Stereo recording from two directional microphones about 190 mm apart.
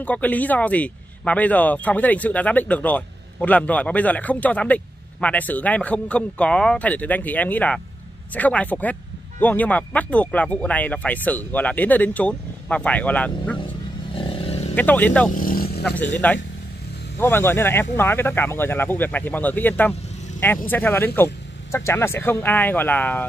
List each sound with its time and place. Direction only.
0.0 s speech: 10° left (ahead or behind)
14.1 s vehicle: 30° left (ahead or behind)
14.8 s speech: 10° left (ahead or behind)
15.3 s a sound: 50° left (ahead or behind)
15.8 s speech: 10° left (ahead or behind)